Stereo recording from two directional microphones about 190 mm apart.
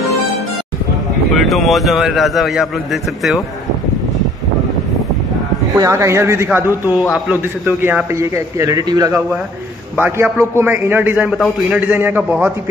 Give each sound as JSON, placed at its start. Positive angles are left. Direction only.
{"t": 1.3, "sound": "a man's voice", "side_deg": 0}
{"t": 5.8, "sound": "a man's voice", "side_deg": -15}